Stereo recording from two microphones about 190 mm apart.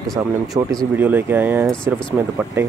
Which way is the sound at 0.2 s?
10° right (ahead or behind).